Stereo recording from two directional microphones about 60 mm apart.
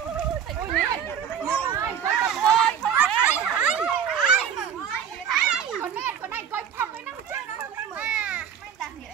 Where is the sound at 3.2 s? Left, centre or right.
Right.